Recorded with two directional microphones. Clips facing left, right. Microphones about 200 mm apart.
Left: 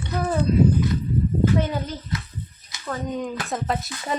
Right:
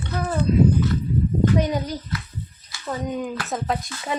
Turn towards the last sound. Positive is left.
turn(degrees=0)  # may be behind; listen again after turning